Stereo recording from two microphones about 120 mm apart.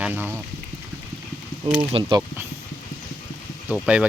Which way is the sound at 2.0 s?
35° right (ahead or behind).